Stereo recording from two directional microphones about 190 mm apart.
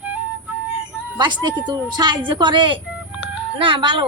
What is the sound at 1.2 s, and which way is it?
A woman's voice, 25° right (ahead or behind).